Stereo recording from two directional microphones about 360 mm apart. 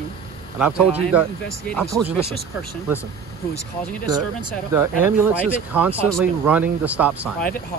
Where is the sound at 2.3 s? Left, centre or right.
Right.